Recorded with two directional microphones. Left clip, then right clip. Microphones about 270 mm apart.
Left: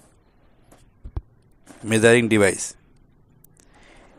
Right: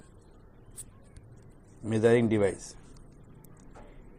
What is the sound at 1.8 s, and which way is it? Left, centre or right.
Speech, left.